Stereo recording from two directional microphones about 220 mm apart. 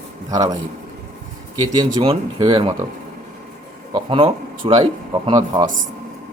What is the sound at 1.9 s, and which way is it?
Speech, 20° right (ahead or behind).